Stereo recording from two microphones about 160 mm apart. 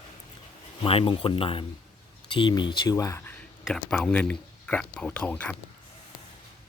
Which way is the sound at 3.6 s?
5° left (ahead or behind).